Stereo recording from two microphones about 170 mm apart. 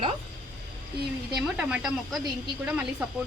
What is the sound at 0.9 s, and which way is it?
Speech, 70° right (ahead or behind).